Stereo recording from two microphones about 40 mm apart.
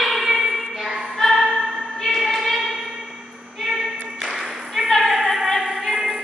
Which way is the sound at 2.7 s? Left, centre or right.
Centre.